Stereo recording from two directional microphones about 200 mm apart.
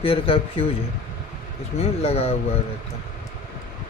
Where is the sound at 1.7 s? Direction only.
30° left (ahead or behind).